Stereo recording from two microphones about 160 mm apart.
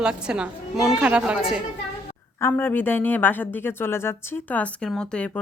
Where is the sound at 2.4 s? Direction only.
15° left (ahead or behind).